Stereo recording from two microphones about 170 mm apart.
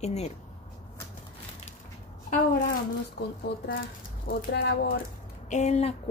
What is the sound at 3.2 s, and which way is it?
Speech, 75° left (ahead or behind).